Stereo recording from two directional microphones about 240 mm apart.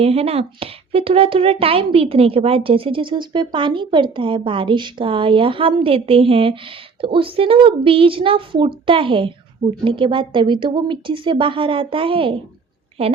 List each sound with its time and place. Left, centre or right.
0.0 s speech: right